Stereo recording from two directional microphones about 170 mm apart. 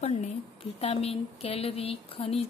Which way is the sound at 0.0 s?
40° left (ahead or behind).